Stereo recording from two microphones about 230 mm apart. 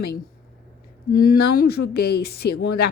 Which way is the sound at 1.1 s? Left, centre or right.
Left.